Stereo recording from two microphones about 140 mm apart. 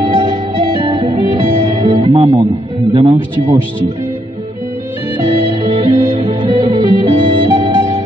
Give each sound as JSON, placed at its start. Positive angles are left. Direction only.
{"t": 0.0, "sound": "music", "side_deg": -35}
{"t": 2.9, "sound": "music", "side_deg": -45}
{"t": 5.1, "sound": "music", "side_deg": -30}
{"t": 6.5, "sound": "music", "side_deg": -25}
{"t": 7.1, "sound": "music", "side_deg": -35}